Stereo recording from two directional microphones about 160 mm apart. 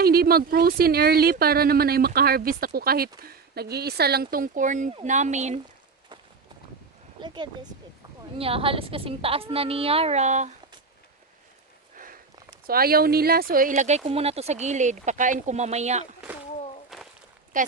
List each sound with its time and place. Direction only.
0.0 s speech: 75° right (ahead or behind); by 5.5 s 45° right (ahead or behind)
7.2 s a woman's voice: 30° right (ahead or behind); by 10.5 s 45° right (ahead or behind)
11.9 s sniff: 60° right (ahead or behind)
12.6 s speech: 70° right (ahead or behind); by 16.0 s 45° right (ahead or behind)
16.9 s a sound: centre (ahead or behind)
17.5 s speech: 55° right (ahead or behind)